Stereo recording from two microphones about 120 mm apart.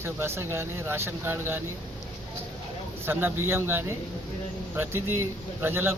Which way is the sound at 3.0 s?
20° right (ahead or behind).